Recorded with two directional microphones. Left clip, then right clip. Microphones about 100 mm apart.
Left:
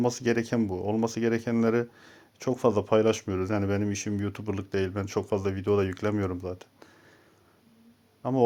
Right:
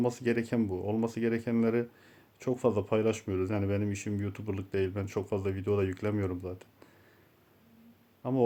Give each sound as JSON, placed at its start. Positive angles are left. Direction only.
{"t": 0.0, "sound": "speech", "side_deg": 25}
{"t": 8.2, "sound": "speech", "side_deg": 25}